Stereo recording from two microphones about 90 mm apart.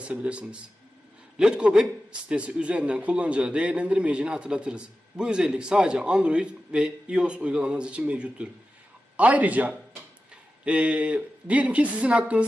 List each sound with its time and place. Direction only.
0.0 s a man's voice: 15° right (ahead or behind)